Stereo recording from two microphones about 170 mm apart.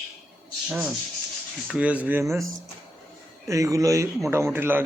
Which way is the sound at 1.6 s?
5° right (ahead or behind).